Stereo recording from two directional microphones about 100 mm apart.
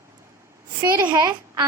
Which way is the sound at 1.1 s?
35° right (ahead or behind).